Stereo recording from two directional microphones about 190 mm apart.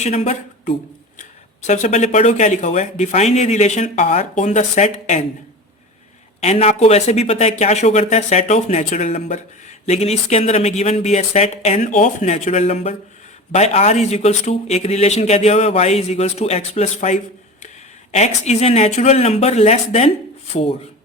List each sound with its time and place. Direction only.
0.0 s speech: 35° left (ahead or behind)
6.4 s speech: 35° left (ahead or behind)